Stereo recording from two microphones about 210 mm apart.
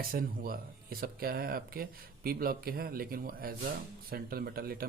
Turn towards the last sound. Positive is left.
turn(degrees=-45)  # may be behind; listen again after turning